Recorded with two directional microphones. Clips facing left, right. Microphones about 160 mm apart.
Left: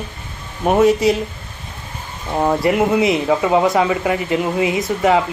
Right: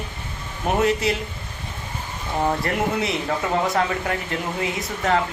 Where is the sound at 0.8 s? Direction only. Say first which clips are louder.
Left 8 dB; 10° left (ahead or behind).